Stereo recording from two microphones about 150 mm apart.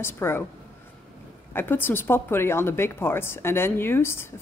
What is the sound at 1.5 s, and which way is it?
Speech, 15° left (ahead or behind).